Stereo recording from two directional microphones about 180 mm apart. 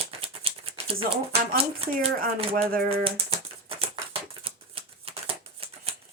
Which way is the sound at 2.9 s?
30° right (ahead or behind).